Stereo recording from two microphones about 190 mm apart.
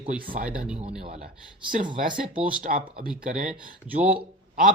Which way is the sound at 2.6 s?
45° right (ahead or behind).